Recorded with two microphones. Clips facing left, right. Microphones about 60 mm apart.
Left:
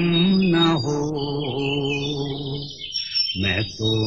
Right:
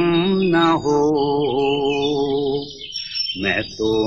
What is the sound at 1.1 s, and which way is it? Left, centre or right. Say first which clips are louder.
Music: right 8 dB; centre.